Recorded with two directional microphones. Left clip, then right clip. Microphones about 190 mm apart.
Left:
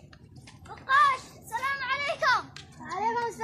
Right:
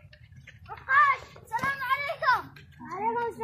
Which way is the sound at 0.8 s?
25° left (ahead or behind).